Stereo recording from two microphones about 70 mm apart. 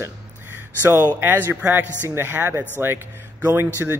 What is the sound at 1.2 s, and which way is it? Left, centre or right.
Speech, right.